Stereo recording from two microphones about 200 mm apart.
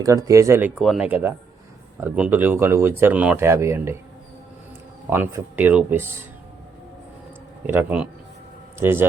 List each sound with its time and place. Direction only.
0.0 s speech: 15° right (ahead or behind)
0.8 s speech: 5° right (ahead or behind)
5.0 s speech: 10° right (ahead or behind)
7.7 s speech: 10° right (ahead or behind)